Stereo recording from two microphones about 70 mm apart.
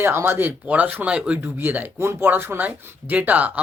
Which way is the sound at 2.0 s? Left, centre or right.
Right.